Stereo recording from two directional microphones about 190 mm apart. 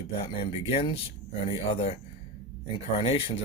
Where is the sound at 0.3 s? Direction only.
30° left (ahead or behind).